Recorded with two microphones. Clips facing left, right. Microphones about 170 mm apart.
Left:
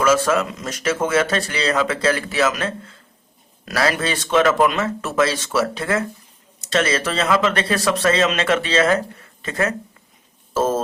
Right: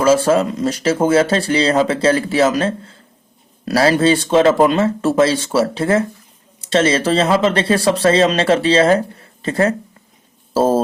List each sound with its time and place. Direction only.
0.0 s speech: 30° right (ahead or behind)